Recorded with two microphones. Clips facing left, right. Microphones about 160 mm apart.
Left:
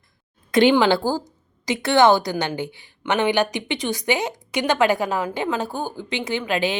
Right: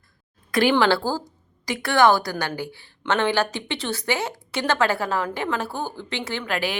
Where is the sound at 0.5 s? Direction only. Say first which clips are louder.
Left 3 dB; 20° left (ahead or behind).